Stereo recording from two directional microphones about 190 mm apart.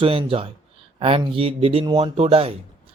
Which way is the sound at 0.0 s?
30° right (ahead or behind).